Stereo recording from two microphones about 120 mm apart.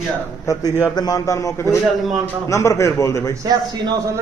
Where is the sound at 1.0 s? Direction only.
30° left (ahead or behind).